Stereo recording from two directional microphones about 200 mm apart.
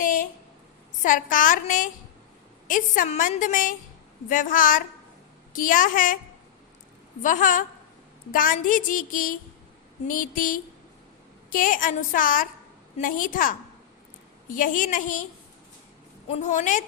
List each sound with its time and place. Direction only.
0.0 s a sound: 40° left (ahead or behind)
1.0 s a woman's voice: 40° left (ahead or behind)
7.2 s a woman's voice: 40° left (ahead or behind)
16.3 s a woman's voice: 35° left (ahead or behind)